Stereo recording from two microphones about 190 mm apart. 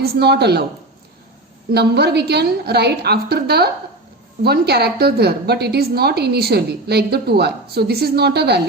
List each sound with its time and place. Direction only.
0.0 s a woman's voice: 60° right (ahead or behind)
1.7 s a woman's voice: 60° right (ahead or behind)